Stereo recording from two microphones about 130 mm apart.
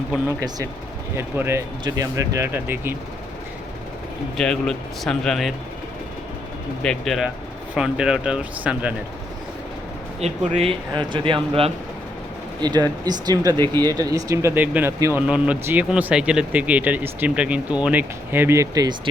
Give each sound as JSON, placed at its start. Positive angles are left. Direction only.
{"t": 0.3, "sound": "speech", "side_deg": -25}
{"t": 4.4, "sound": "speech", "side_deg": 5}
{"t": 6.8, "sound": "speech", "side_deg": 0}
{"t": 10.2, "sound": "speech", "side_deg": -55}
{"t": 10.9, "sound": "speech", "side_deg": -40}
{"t": 12.6, "sound": "speech", "side_deg": -30}